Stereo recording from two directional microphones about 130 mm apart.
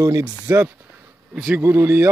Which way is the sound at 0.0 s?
25° right (ahead or behind).